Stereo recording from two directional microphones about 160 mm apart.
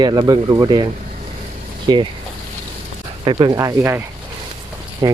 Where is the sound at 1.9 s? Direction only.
25° right (ahead or behind).